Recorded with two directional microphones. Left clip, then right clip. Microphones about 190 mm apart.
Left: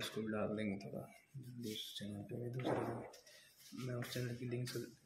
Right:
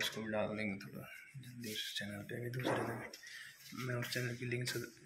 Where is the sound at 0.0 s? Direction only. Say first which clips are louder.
Right 4 dB; 5° left (ahead or behind).